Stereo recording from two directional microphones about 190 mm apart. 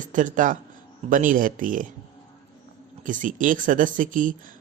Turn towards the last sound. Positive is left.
turn(degrees=-45)  # may be behind; listen again after turning